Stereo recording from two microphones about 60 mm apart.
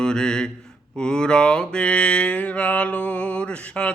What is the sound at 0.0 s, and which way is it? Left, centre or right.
Mantra, centre.